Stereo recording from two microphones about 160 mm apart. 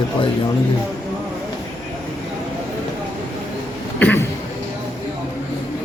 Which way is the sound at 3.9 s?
10° left (ahead or behind).